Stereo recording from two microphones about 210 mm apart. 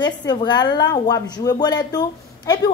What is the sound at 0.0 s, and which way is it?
A woman's voice, 20° left (ahead or behind).